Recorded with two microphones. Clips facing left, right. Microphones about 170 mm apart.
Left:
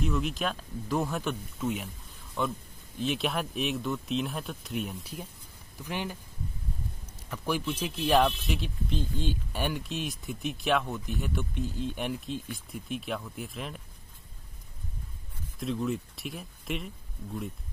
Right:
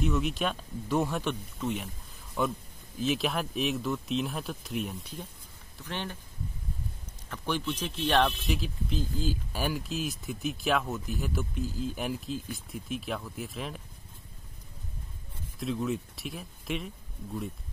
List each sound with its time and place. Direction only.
0.0 s speech: centre (ahead or behind)
7.2 s speech: 10° left (ahead or behind)
15.6 s speech: centre (ahead or behind)